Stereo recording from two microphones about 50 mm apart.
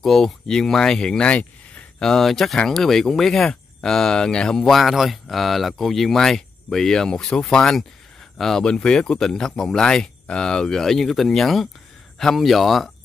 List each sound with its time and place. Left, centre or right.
0.0 s speech: centre; by 1.9 s left
2.0 s speech: centre